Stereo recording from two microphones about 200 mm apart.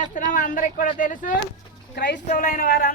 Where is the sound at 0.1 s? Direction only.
40° left (ahead or behind).